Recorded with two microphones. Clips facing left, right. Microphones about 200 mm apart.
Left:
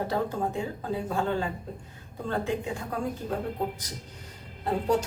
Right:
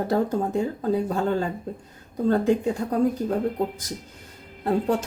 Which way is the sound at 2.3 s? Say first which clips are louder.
Right 9 dB; 40° right (ahead or behind).